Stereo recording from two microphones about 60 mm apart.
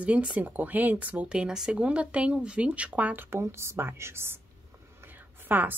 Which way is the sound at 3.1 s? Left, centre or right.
Right.